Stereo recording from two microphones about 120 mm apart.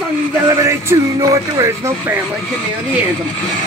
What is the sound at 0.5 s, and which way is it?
Speech, 25° right (ahead or behind).